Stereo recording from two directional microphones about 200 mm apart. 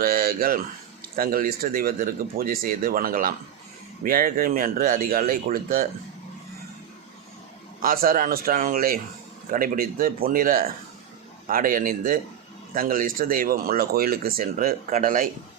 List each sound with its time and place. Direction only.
0.0 s speech: 50° right (ahead or behind)
7.8 s speech: 45° right (ahead or behind)